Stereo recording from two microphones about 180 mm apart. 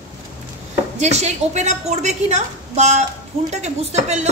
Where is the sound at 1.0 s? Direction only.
40° right (ahead or behind).